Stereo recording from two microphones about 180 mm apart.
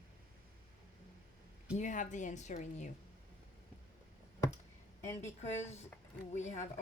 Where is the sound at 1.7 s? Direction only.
45° left (ahead or behind).